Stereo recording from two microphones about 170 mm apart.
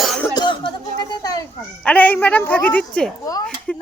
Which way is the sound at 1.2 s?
20° left (ahead or behind).